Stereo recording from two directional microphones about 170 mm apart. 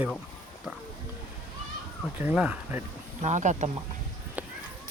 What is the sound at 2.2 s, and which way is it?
Speech, 10° right (ahead or behind).